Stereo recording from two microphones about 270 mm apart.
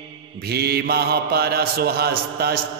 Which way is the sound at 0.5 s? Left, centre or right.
Right.